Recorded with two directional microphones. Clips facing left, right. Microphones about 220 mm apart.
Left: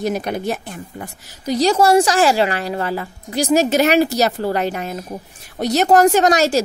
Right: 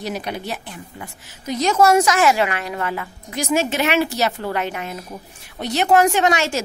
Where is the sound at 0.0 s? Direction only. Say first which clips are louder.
Left 6 dB; 45° left (ahead or behind).